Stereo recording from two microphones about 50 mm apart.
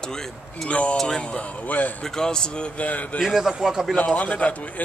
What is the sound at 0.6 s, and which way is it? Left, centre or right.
Speech, left.